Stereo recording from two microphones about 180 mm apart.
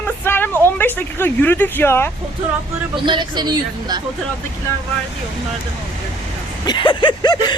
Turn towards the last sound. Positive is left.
turn(degrees=25)  # may be behind; listen again after turning